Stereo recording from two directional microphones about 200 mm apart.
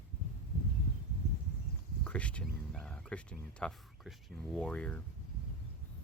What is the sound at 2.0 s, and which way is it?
Speech, 5° left (ahead or behind).